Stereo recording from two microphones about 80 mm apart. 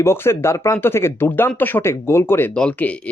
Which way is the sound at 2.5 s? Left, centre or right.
Centre.